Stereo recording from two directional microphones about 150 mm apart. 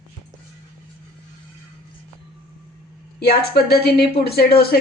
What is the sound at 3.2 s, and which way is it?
Speech, 90° left.